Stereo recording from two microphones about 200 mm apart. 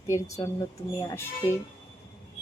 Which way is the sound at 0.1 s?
15° left (ahead or behind).